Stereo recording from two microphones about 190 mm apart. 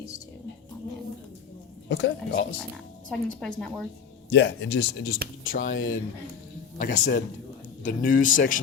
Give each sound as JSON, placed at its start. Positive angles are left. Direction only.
{"t": 1.9, "sound": "speech", "side_deg": 70}
{"t": 3.1, "sound": "a woman's voice", "side_deg": 5}
{"t": 4.3, "sound": "speech", "side_deg": 65}
{"t": 5.4, "sound": "a sound", "side_deg": 90}
{"t": 5.7, "sound": "speech", "side_deg": 90}
{"t": 6.7, "sound": "speech", "side_deg": 45}